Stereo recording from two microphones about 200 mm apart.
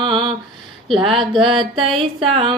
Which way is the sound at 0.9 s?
25° right (ahead or behind).